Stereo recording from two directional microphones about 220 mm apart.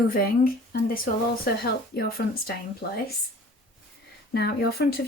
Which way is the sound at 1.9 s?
45° left (ahead or behind).